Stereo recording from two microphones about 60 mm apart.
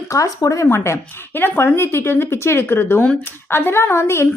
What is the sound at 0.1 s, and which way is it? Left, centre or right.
Speech, left.